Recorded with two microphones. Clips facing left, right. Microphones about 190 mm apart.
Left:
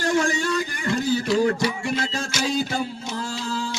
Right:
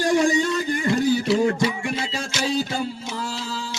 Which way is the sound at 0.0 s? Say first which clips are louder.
Right 3 dB; 15° right (ahead or behind).